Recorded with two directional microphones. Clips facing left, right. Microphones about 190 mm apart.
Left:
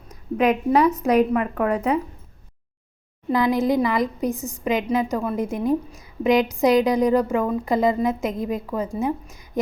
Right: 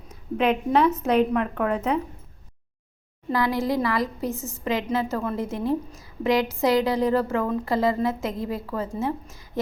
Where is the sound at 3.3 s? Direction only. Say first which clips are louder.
Left 4 dB; 20° left (ahead or behind).